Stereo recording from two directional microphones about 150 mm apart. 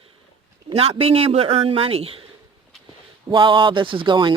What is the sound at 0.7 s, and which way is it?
A man's voice, 40° right (ahead or behind).